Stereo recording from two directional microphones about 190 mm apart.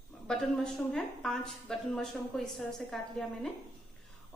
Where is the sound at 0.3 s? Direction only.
Centre (ahead or behind).